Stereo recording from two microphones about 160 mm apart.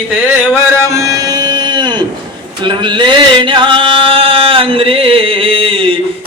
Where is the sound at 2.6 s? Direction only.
30° right (ahead or behind).